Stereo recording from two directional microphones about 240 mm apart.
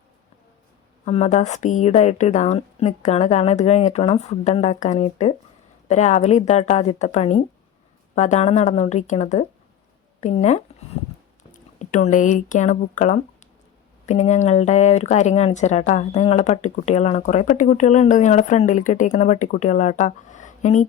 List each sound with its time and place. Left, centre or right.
1.0 s speech: left